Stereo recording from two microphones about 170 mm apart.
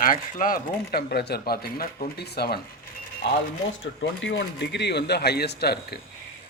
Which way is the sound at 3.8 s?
90° left.